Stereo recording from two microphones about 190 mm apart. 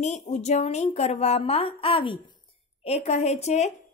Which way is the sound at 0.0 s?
35° left (ahead or behind).